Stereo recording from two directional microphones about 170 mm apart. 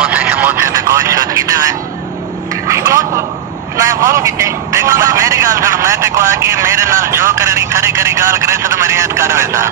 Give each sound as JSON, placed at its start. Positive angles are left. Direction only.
{"t": 0.0, "sound": "vehicle", "side_deg": -10}
{"t": 2.7, "sound": "a sound", "side_deg": -15}
{"t": 3.7, "sound": "a man's voice", "side_deg": -20}